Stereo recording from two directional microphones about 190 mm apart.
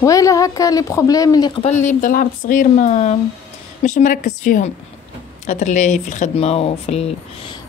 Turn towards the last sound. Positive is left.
turn(degrees=30)  # may be behind; listen again after turning